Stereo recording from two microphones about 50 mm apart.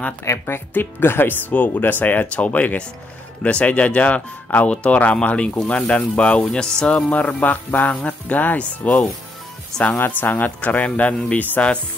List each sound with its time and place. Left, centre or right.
0.5 s speech: left; by 7.1 s centre
7.1 s speech: left
9.9 s speech: left